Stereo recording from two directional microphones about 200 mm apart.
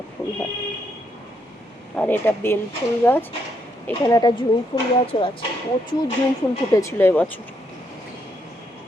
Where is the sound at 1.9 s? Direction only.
5° left (ahead or behind); by 5.3 s 30° left (ahead or behind).